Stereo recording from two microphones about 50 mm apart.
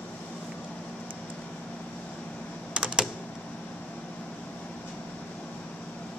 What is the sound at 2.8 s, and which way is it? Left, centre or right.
Typing, centre.